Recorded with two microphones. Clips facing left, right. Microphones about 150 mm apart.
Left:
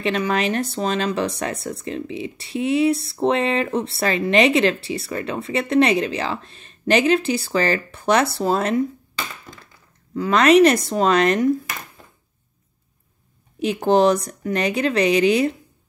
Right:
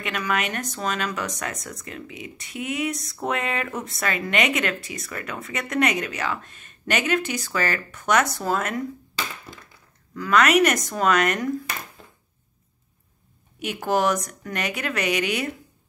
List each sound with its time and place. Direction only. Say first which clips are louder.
0.0 s speech: left 6 dB; 30° left (ahead or behind)
10.1 s speech: left 5 dB; 25° left (ahead or behind)
13.6 s speech: left 7 dB; 30° left (ahead or behind)